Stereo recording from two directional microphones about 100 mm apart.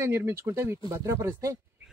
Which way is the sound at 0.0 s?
25° right (ahead or behind).